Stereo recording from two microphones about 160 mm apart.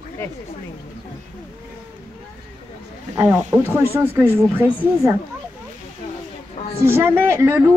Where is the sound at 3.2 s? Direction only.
10° right (ahead or behind).